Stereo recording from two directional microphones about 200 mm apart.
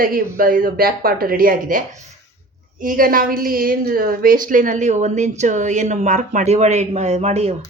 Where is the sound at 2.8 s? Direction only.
45° right (ahead or behind).